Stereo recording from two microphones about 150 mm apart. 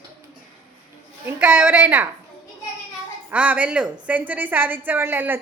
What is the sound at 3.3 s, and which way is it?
A woman's voice, 10° right (ahead or behind).